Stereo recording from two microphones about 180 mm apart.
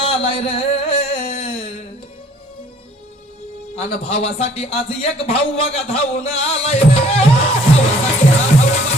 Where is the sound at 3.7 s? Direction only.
35° left (ahead or behind).